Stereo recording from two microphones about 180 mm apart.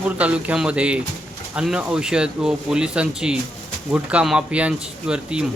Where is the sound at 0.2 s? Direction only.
5° right (ahead or behind).